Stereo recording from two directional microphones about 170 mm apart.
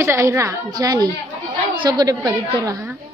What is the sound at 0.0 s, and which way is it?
A woman's voice, 15° right (ahead or behind).